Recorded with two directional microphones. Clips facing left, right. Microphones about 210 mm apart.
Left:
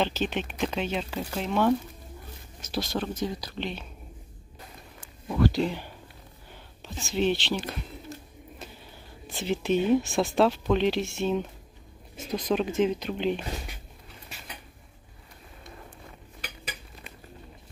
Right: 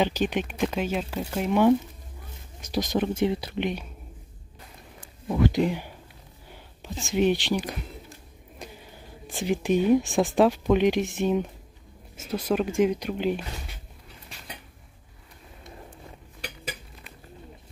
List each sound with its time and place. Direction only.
0.0 s speech: 15° right (ahead or behind)
5.3 s speech: 20° right (ahead or behind)
7.1 s speech: 15° right (ahead or behind)
8.6 s a sound: 15° right (ahead or behind)
9.4 s speech: 15° right (ahead or behind)